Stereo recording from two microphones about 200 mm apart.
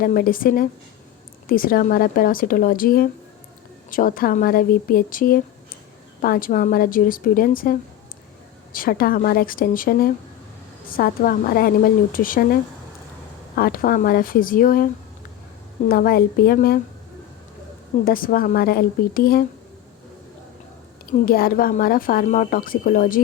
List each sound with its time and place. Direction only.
0.0 s a woman's voice: 45° left (ahead or behind)
13.6 s a woman's voice: 45° left (ahead or behind)
15.9 s a woman's voice: 45° left (ahead or behind)
18.0 s a woman's voice: 45° left (ahead or behind)
21.1 s a woman's voice: 45° left (ahead or behind)